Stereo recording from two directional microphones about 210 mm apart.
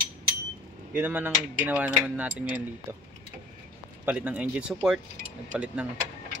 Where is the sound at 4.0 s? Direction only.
5° right (ahead or behind).